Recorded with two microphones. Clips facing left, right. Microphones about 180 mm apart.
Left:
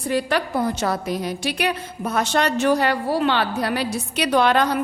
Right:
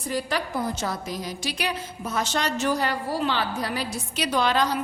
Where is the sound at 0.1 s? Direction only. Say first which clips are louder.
Left 6 dB; 65° left (ahead or behind).